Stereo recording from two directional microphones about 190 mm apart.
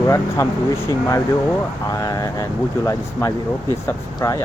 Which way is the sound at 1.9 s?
20° left (ahead or behind).